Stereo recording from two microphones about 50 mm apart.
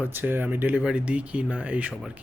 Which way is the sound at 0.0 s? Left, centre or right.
Right.